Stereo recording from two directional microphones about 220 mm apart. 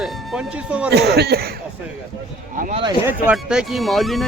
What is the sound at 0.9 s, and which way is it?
Speech, 45° right (ahead or behind).